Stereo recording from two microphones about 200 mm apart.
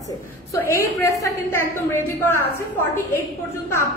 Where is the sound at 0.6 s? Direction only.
15° left (ahead or behind).